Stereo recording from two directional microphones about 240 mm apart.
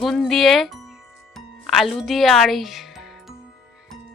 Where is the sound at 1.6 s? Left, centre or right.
Centre.